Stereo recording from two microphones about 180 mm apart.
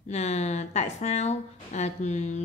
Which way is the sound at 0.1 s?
40° left (ahead or behind).